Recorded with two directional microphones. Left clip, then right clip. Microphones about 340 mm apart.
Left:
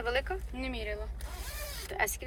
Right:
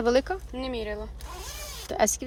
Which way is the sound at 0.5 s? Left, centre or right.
Right.